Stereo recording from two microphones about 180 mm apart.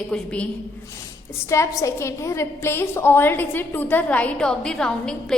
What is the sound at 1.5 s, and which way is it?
A woman's voice, 15° left (ahead or behind).